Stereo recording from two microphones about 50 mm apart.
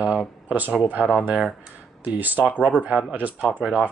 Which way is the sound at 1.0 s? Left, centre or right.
Centre.